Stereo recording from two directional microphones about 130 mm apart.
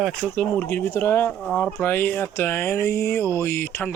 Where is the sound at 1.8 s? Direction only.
15° left (ahead or behind).